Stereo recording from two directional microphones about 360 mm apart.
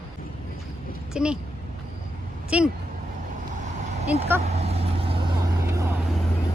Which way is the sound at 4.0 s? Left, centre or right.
Centre.